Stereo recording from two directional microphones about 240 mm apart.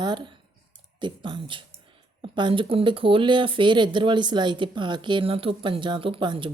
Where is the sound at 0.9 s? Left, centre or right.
Centre.